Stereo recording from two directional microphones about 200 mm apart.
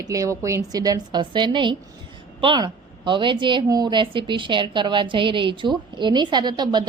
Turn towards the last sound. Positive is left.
turn(degrees=-20)  # may be behind; listen again after turning